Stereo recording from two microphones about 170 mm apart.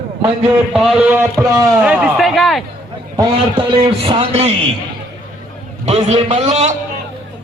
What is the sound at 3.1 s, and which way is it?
A man's voice, 25° right (ahead or behind).